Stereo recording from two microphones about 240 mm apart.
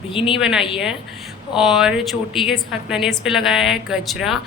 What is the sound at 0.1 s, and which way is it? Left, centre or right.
Speech, left.